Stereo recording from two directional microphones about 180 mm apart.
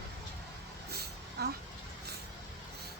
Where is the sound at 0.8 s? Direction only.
60° right (ahead or behind).